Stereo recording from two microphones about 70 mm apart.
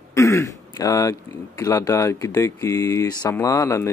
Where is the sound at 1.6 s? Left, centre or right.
Left.